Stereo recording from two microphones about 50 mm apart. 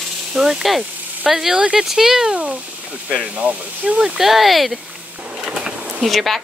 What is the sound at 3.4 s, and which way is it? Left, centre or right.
Speech, right.